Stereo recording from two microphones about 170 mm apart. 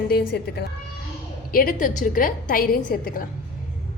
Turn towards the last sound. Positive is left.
turn(degrees=55)  # may be behind; listen again after turning